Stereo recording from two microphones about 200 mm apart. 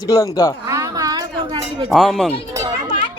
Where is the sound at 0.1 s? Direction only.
15° left (ahead or behind).